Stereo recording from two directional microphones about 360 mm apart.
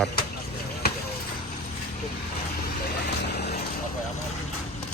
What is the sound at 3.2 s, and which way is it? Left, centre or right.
Vehicle, left.